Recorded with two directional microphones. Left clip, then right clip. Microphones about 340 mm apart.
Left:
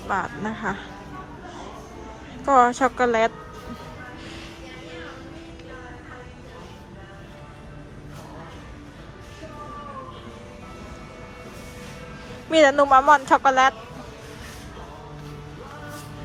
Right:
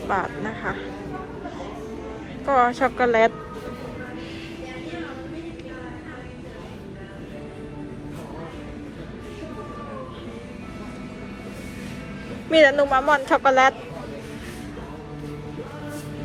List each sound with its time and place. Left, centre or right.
0.1 s a woman's voice: centre
2.5 s a woman's voice: centre
12.5 s a woman's voice: centre